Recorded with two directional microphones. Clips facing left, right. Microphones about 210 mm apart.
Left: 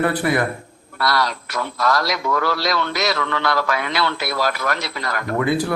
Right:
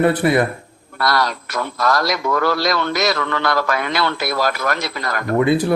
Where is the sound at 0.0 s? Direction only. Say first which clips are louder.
Right 4 dB; 25° right (ahead or behind).